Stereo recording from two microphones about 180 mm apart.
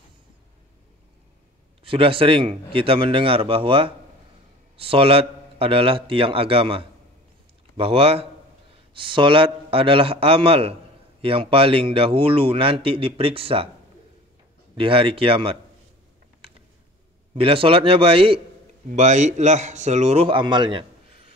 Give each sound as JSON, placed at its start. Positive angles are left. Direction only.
{"t": 1.9, "sound": "a man's voice", "side_deg": -30}
{"t": 14.8, "sound": "a man's voice", "side_deg": -30}
{"t": 17.3, "sound": "a man's voice", "side_deg": -30}
{"t": 18.9, "sound": "a man's voice", "side_deg": -40}